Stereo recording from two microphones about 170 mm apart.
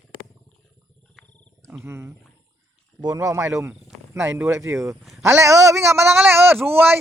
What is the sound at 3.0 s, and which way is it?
Speech, 20° right (ahead or behind).